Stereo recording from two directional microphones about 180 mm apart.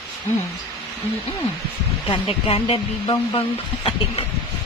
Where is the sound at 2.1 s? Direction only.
30° left (ahead or behind).